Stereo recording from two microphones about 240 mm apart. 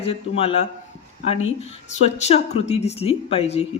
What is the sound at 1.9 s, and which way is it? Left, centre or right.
Speech, left.